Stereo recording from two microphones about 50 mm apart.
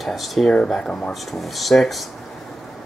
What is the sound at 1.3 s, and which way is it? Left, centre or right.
Speech, centre.